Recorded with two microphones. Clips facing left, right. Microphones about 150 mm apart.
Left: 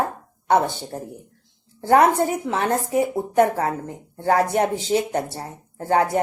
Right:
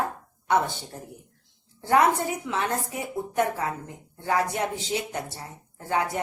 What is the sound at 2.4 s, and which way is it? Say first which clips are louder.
Speech: left 6 dB; 50° left (ahead or behind).